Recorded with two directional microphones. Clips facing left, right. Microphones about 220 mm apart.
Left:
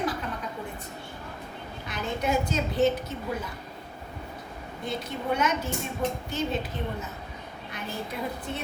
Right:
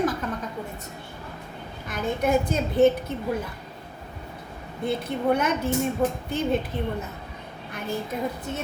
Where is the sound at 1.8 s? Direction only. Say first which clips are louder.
Right 4 dB; 50° right (ahead or behind).